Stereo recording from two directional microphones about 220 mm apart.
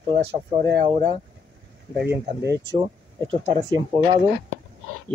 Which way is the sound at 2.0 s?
10° right (ahead or behind).